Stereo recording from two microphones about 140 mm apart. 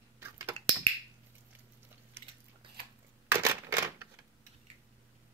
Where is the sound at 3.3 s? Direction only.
20° right (ahead or behind).